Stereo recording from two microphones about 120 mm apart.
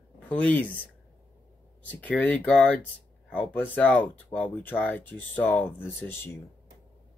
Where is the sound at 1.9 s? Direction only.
10° left (ahead or behind).